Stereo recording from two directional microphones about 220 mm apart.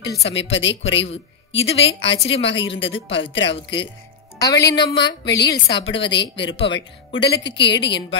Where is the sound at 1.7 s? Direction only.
25° left (ahead or behind).